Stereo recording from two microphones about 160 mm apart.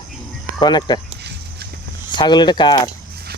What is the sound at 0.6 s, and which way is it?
Speech, 25° left (ahead or behind).